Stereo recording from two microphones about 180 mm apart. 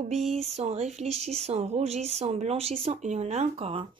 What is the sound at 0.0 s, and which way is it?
Speech, 40° right (ahead or behind).